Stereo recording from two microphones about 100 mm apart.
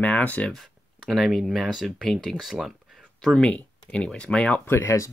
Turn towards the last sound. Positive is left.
turn(degrees=25)  # may be behind; listen again after turning